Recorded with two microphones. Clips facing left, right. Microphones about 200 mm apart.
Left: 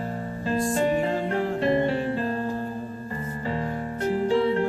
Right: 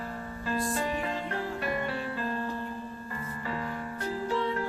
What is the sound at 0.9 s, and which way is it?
Music, 40° left (ahead or behind).